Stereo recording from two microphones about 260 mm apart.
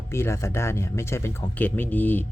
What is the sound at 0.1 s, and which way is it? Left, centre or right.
Speech, centre.